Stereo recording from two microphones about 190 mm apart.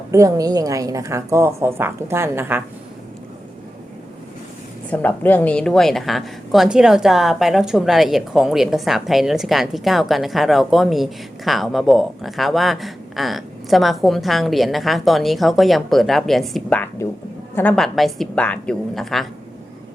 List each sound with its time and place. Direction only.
0.1 s a woman's voice: 15° right (ahead or behind)
4.9 s a woman's voice: 10° left (ahead or behind)